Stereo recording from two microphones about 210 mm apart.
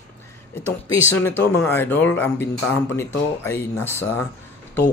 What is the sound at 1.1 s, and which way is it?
Speech, 10° left (ahead or behind).